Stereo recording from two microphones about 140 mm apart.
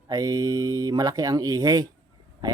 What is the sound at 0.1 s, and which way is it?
Speech, 25° right (ahead or behind).